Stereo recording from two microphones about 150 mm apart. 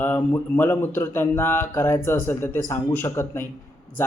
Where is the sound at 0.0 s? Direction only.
15° left (ahead or behind).